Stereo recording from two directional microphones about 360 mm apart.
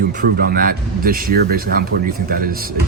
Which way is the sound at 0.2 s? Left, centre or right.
Right.